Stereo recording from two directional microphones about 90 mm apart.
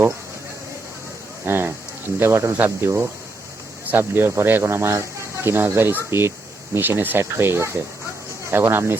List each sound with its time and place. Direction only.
1.5 s speech: 25° right (ahead or behind)